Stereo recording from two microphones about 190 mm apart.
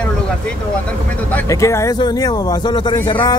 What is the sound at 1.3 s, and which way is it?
Speech, 10° left (ahead or behind).